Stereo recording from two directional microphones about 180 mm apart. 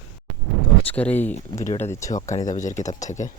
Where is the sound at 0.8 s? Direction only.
10° left (ahead or behind).